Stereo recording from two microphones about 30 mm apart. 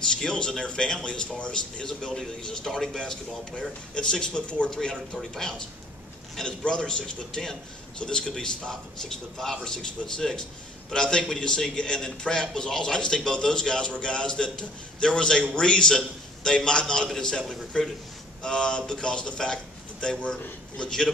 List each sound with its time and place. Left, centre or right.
0.1 s a man's voice: left
3.9 s speech: left
5.1 s a man's voice: centre
6.6 s a man's voice: left
9.4 s a man's voice: centre